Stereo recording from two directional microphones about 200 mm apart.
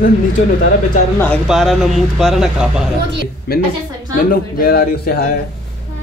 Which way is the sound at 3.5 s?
50° left (ahead or behind).